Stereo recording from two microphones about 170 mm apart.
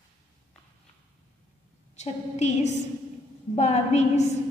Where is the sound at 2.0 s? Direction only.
40° left (ahead or behind).